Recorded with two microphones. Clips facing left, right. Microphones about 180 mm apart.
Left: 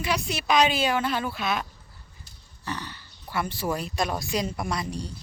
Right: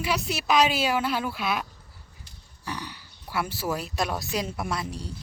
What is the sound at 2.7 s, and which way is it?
A woman's voice, 10° right (ahead or behind).